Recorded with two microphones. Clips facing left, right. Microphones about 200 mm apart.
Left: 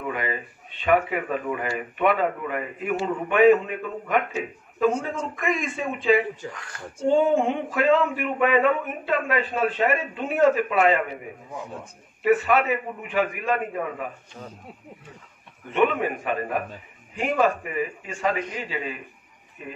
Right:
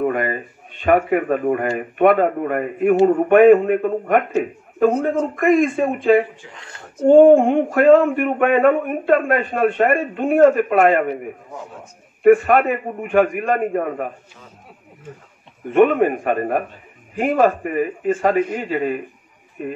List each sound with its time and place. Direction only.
0.0 s speech: 50° right (ahead or behind)
6.5 s speech: 25° right (ahead or behind)
7.1 s speech: 50° right (ahead or behind)
12.2 s speech: 50° right (ahead or behind)
15.7 s speech: 50° right (ahead or behind)